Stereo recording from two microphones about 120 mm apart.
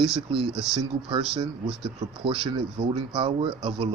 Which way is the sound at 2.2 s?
50° right (ahead or behind).